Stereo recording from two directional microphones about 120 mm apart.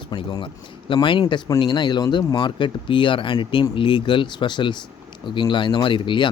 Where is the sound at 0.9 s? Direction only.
45° left (ahead or behind).